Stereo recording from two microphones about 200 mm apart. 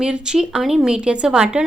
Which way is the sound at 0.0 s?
5° right (ahead or behind).